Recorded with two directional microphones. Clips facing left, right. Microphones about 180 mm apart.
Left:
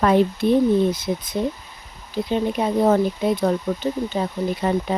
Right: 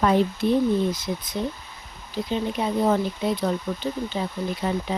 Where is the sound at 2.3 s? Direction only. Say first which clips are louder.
Left 4 dB; 55° left (ahead or behind).